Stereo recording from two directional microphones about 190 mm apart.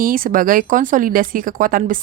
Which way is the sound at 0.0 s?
45° right (ahead or behind).